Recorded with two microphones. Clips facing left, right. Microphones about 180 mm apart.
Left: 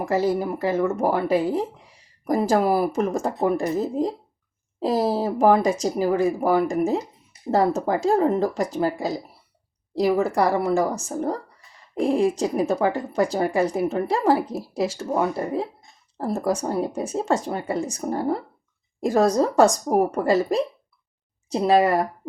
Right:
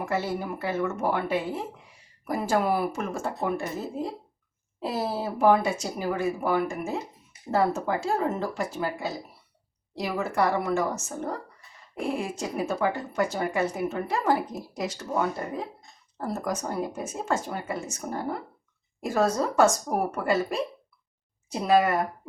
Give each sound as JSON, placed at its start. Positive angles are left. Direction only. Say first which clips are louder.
{"t": 0.0, "sound": "speech", "louder": "left 7 dB", "side_deg": 35}